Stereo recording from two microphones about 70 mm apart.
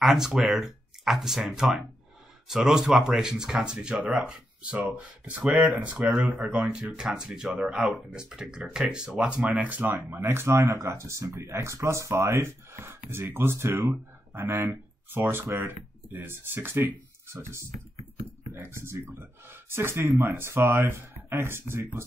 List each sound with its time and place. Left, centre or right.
0.0 s speech: centre; by 22.0 s right